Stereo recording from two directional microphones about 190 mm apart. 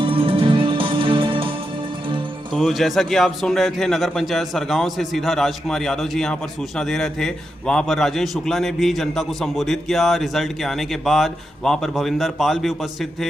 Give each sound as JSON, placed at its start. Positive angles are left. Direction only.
{"t": 0.0, "sound": "music", "side_deg": -30}
{"t": 2.6, "sound": "a man's voice", "side_deg": 0}